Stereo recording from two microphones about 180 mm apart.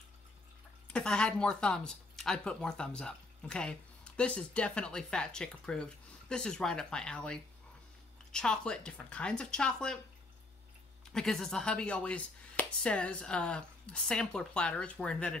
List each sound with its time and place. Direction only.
0.9 s speech: 5° left (ahead or behind)
11.1 s speech: centre (ahead or behind)